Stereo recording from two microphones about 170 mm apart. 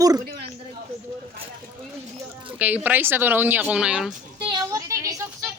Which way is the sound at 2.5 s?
10° right (ahead or behind).